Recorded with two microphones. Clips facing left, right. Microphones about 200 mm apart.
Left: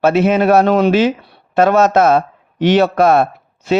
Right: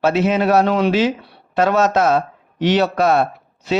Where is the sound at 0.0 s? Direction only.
55° left (ahead or behind).